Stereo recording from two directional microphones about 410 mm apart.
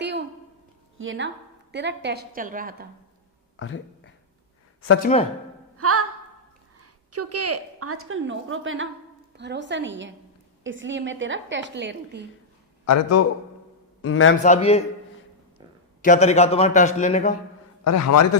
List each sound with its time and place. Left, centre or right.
0.0 s a sound: right
0.9 s a woman's voice: right
3.6 s speech: left
5.7 s music: right
6.7 s a woman's voice: right
12.8 s a man's voice: left
14.4 s a man's voice: centre
16.0 s a man's voice: centre
17.8 s a man's voice: left